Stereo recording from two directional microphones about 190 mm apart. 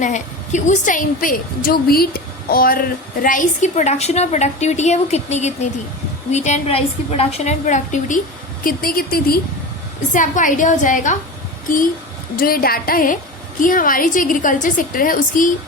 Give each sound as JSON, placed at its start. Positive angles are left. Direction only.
{"t": 0.0, "sound": "a woman's voice", "side_deg": 40}
{"t": 10.1, "sound": "a woman's voice", "side_deg": 40}
{"t": 12.4, "sound": "a woman's voice", "side_deg": 50}